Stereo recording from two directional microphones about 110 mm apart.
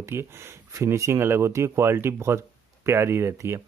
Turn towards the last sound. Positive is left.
turn(degrees=-25)  # may be behind; listen again after turning